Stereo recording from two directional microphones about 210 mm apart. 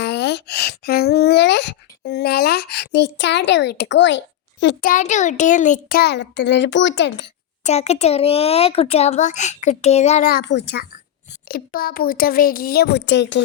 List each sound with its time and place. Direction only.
0.0 s a sound: 55° left (ahead or behind)
4.8 s a child's voice: 40° left (ahead or behind); by 7.3 s 55° left (ahead or behind)
7.6 s a child's voice: 30° left (ahead or behind)
10.2 s a child's voice: 50° left (ahead or behind)